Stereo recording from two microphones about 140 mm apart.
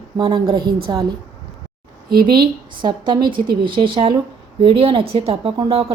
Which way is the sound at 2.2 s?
30° right (ahead or behind).